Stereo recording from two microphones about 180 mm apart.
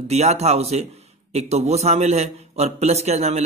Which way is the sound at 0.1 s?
35° right (ahead or behind).